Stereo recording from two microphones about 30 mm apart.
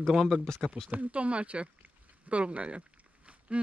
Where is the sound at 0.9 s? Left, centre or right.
Right.